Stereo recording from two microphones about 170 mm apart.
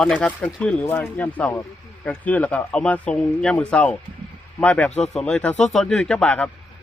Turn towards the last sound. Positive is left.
turn(degrees=5)  # may be behind; listen again after turning